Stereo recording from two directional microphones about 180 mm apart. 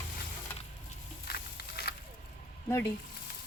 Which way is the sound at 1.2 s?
60° left (ahead or behind).